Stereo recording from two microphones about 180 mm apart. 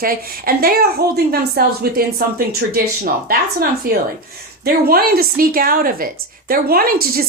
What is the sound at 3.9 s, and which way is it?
A woman's voice, 55° right (ahead or behind).